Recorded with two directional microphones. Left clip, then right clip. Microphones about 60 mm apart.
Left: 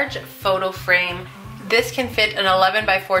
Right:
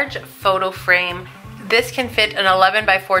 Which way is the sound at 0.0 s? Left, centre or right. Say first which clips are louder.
Right 3 dB; right.